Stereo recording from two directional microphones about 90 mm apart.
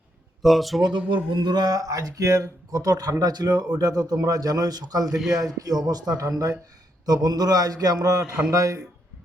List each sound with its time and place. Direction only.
0.4 s speech: centre (ahead or behind)
0.8 s speech: 60° right (ahead or behind)
5.0 s speech: 5° right (ahead or behind)
5.4 s a man's voice: 45° right (ahead or behind)